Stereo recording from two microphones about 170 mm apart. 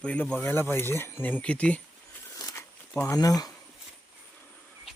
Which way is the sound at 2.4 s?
20° left (ahead or behind).